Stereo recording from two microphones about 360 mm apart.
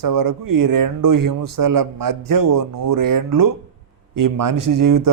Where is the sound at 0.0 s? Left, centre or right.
Right.